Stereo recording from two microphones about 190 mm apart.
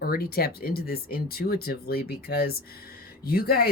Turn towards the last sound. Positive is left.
turn(degrees=55)  # may be behind; listen again after turning